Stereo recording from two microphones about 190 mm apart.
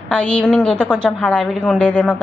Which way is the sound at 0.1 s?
5° left (ahead or behind).